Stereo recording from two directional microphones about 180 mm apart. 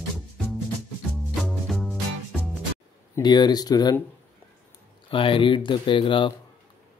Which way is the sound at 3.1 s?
25° left (ahead or behind).